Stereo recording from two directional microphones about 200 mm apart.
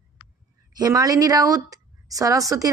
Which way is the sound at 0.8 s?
20° right (ahead or behind).